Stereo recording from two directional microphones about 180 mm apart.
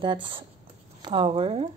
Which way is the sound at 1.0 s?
25° right (ahead or behind).